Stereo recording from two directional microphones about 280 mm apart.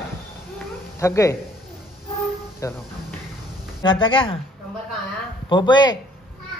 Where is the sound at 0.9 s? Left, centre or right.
Centre.